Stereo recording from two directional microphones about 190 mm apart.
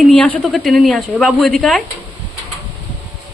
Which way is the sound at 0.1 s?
5° left (ahead or behind).